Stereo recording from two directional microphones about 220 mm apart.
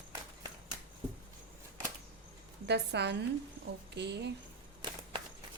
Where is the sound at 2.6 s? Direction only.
50° right (ahead or behind).